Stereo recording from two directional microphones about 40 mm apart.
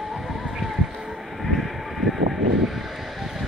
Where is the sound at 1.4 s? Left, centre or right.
Centre.